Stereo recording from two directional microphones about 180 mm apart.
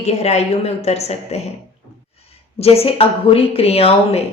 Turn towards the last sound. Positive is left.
turn(degrees=35)  # may be behind; listen again after turning